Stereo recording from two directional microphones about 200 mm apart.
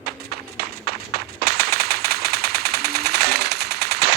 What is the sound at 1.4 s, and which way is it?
Machine gun, 50° right (ahead or behind).